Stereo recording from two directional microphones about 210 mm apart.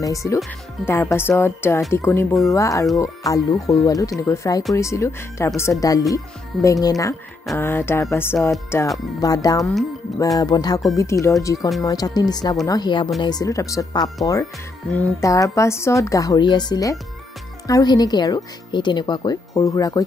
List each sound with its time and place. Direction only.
0.0 s a woman's voice: 15° left (ahead or behind)